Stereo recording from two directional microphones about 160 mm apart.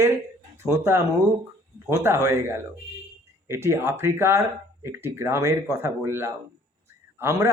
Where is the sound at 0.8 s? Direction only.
15° right (ahead or behind).